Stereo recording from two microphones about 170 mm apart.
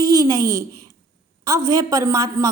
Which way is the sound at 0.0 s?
20° right (ahead or behind).